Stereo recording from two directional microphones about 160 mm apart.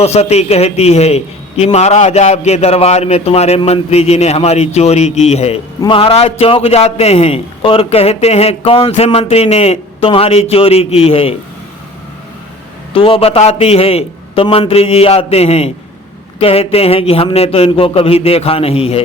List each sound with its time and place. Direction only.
0.0 s a man's voice: 40° left (ahead or behind)
12.9 s a man's voice: 35° left (ahead or behind)